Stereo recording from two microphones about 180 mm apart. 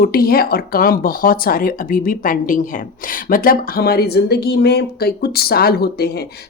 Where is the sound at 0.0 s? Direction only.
55° left (ahead or behind).